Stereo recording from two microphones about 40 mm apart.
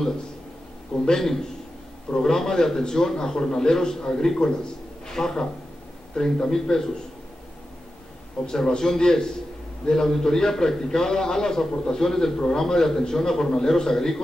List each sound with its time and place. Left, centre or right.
1.0 s a man's voice: centre
8.5 s a man's voice: centre